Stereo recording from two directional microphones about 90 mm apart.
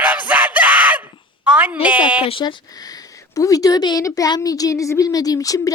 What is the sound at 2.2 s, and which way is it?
Speech, 80° left.